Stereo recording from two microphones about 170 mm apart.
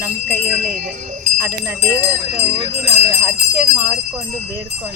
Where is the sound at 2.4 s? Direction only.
30° right (ahead or behind).